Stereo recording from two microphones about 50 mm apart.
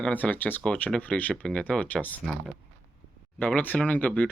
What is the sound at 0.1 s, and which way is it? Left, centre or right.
Speech, left.